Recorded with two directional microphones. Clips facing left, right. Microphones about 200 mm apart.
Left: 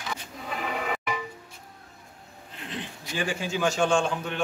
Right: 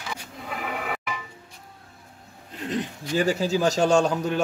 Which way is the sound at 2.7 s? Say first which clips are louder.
Right 9 dB; 40° right (ahead or behind).